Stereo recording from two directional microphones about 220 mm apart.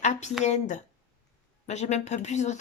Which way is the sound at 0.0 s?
30° left (ahead or behind).